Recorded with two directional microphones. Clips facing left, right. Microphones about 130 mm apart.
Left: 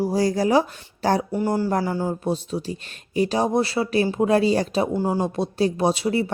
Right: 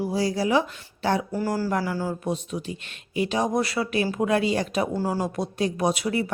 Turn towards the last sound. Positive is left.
turn(degrees=30)  # may be behind; listen again after turning